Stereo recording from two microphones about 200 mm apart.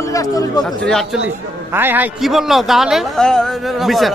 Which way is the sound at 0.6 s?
Centre (ahead or behind).